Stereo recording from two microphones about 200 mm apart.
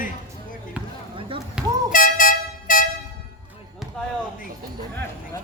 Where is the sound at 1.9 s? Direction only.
40° left (ahead or behind).